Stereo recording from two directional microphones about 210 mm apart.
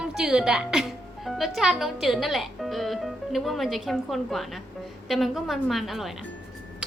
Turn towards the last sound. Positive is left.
turn(degrees=0)  # may be behind; listen again after turning